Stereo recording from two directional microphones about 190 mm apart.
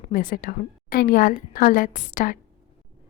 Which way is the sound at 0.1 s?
45° left (ahead or behind).